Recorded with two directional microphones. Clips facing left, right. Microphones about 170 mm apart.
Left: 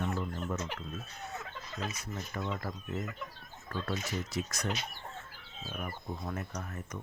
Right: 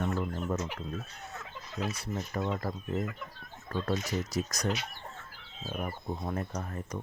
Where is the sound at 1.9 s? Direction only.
40° right (ahead or behind).